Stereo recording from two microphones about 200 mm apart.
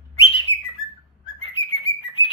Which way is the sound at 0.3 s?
25° left (ahead or behind).